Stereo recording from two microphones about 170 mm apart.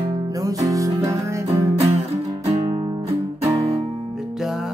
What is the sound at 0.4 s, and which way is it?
Music, 20° right (ahead or behind).